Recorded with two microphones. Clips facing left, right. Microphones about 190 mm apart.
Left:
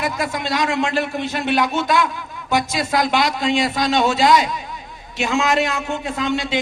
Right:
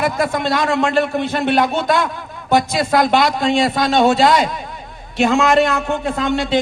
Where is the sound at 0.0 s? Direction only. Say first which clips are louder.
Right 5 dB; 50° right (ahead or behind).